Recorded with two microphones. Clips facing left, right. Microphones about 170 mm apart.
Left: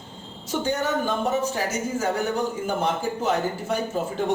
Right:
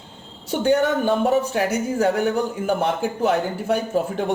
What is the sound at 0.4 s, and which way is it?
Speech, 60° right (ahead or behind).